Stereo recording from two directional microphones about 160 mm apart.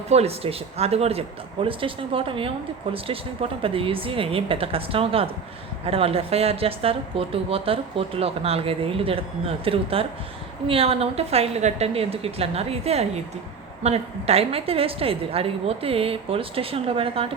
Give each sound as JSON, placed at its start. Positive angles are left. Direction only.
{"t": 0.1, "sound": "a woman's voice", "side_deg": -40}
{"t": 3.6, "sound": "a woman's voice", "side_deg": -35}